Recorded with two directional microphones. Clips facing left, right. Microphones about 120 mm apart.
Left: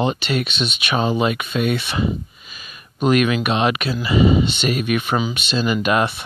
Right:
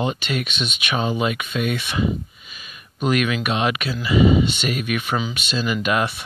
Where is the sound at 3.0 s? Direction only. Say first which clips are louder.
Left 4 dB; 30° left (ahead or behind).